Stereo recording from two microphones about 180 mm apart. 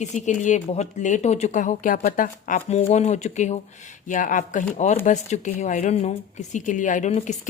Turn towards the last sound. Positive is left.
turn(degrees=40)  # may be behind; listen again after turning